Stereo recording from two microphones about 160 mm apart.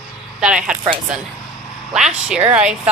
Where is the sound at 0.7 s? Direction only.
5° right (ahead or behind).